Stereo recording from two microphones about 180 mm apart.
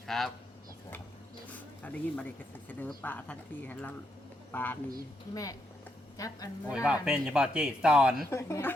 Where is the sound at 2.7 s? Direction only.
10° left (ahead or behind).